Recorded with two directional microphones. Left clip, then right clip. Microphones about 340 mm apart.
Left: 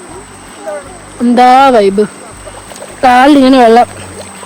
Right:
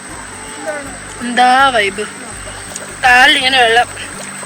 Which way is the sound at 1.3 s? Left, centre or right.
Centre.